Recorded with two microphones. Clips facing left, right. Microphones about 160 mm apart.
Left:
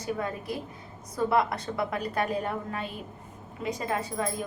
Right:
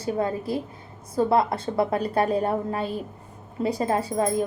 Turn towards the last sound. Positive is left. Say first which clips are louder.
# right 7 dB
turn(degrees=-35)  # may be behind; listen again after turning